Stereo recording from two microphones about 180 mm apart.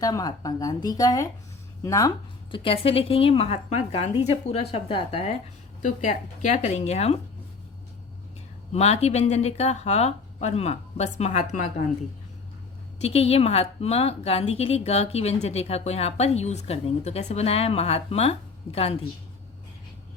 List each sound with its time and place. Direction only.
0.0 s a woman's voice: 20° left (ahead or behind)
5.8 s a woman's voice: 45° left (ahead or behind)
8.7 s a woman's voice: 35° left (ahead or behind)
13.0 s a woman's voice: 35° left (ahead or behind)